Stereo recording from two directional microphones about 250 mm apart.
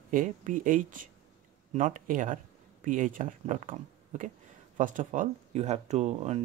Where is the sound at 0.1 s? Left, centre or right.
Right.